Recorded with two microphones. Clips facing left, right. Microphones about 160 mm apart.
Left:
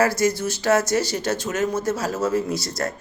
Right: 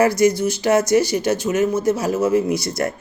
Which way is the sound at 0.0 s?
15° right (ahead or behind).